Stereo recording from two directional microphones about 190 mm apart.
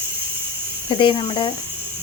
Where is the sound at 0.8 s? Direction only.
25° left (ahead or behind).